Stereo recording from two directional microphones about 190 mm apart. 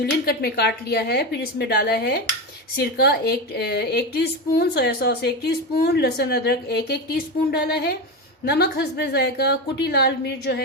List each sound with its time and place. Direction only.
0.0 s a woman's voice: 55° left (ahead or behind)